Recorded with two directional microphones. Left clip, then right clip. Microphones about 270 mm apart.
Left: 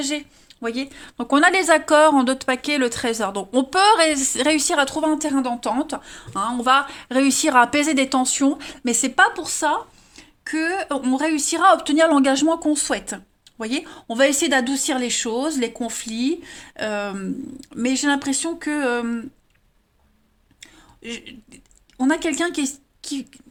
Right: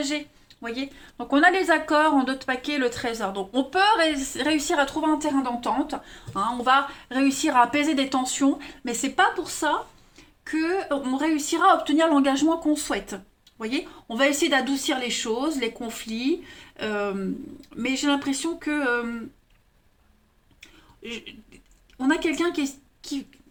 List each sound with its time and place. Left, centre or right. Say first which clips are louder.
0.0 s a woman's voice: left 2 dB; left
21.9 s speech: left 3 dB; left